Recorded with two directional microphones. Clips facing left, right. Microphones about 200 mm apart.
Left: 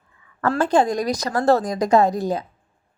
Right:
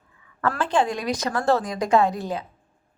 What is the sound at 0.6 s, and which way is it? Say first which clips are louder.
A woman's voice: left 5 dB; 40° left (ahead or behind).